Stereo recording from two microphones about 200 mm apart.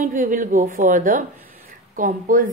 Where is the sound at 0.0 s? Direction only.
40° right (ahead or behind).